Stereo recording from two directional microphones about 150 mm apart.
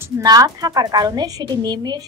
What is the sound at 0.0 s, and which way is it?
A woman's voice, 25° right (ahead or behind).